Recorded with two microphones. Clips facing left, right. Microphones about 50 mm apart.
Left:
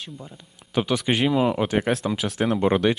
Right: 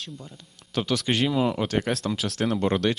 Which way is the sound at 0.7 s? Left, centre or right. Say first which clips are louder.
Left 3 dB; centre.